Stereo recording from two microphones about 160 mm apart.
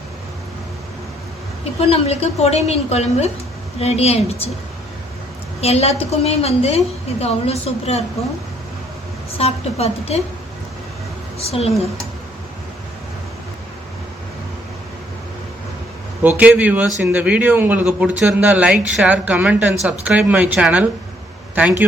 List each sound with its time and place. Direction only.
1.8 s a woman's voice: 40° left (ahead or behind)
5.5 s a woman's voice: 40° left (ahead or behind)
9.4 s a woman's voice: 40° left (ahead or behind)
11.3 s a woman's voice: 40° left (ahead or behind)
16.4 s a woman's voice: 10° right (ahead or behind)